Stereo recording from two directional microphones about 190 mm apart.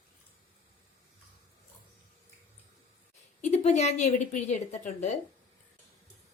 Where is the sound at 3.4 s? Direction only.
35° left (ahead or behind).